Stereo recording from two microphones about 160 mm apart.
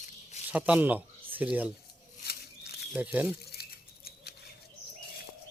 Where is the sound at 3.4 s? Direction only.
80° left.